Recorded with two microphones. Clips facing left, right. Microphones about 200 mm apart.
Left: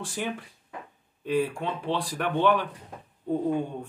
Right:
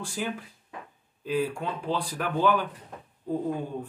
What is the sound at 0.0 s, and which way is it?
Speech, centre (ahead or behind).